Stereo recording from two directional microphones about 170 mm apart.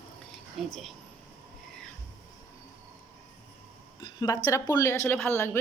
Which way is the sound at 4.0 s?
20° left (ahead or behind).